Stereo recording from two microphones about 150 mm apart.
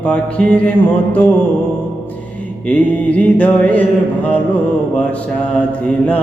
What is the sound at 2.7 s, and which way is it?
Mantra, 10° left (ahead or behind).